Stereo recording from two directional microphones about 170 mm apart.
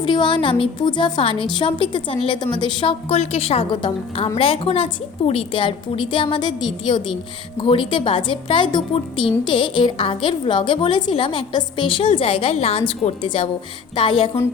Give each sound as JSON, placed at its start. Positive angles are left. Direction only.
{"t": 0.0, "sound": "a woman's voice", "side_deg": 30}